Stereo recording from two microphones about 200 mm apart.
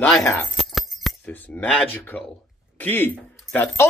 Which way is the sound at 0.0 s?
10° left (ahead or behind).